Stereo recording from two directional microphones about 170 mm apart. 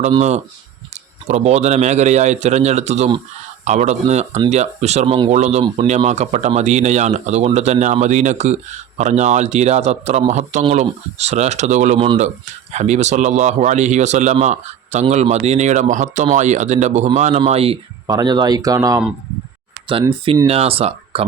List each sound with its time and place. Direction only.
0.2 s speech: 40° right (ahead or behind)
18.1 s speech: 25° right (ahead or behind)
20.5 s speech: 35° right (ahead or behind)